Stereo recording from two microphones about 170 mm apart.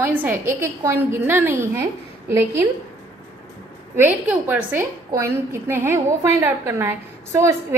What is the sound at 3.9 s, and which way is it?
A woman's voice, 10° right (ahead or behind).